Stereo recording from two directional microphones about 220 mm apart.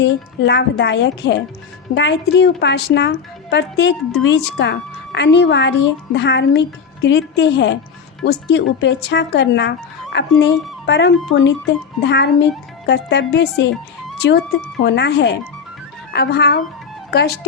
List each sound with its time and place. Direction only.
0.0 s a woman's voice: 50° left (ahead or behind)